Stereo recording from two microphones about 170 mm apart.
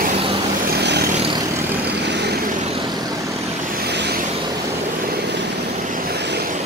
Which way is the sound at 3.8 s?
90° right.